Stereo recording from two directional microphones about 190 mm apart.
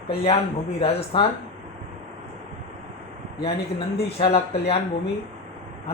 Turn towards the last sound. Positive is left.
turn(degrees=30)  # may be behind; listen again after turning